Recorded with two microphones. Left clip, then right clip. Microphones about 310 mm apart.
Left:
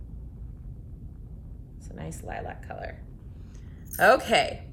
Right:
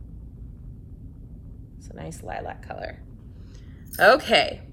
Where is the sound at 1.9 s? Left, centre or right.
Centre.